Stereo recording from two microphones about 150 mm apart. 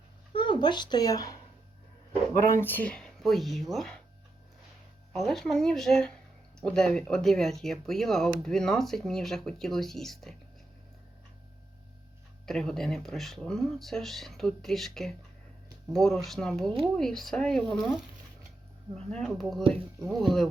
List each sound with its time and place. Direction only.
0.3 s speech: 35° left (ahead or behind)
2.6 s speech: 10° left (ahead or behind)
5.1 s speech: centre (ahead or behind)
12.5 s speech: 5° left (ahead or behind)